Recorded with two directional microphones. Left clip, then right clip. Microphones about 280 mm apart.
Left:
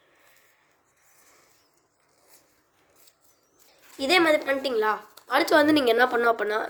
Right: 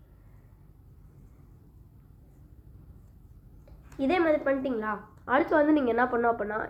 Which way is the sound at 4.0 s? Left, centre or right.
Left.